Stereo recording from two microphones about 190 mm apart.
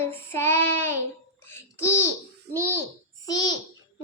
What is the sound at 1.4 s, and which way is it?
Babbling, 15° left (ahead or behind).